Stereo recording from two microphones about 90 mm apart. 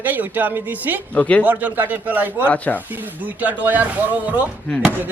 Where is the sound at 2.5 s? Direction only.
20° left (ahead or behind).